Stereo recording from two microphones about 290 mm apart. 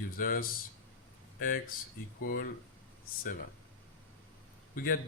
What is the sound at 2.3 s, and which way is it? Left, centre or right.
Speech, left.